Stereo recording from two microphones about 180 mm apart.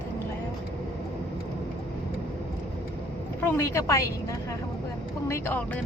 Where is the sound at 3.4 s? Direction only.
15° left (ahead or behind).